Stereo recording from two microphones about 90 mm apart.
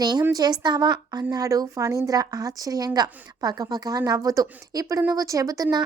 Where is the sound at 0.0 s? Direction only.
50° right (ahead or behind).